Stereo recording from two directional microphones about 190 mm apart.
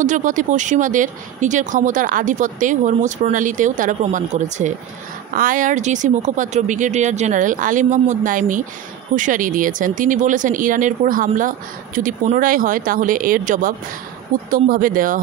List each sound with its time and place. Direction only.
0.0 s speech: 40° right (ahead or behind)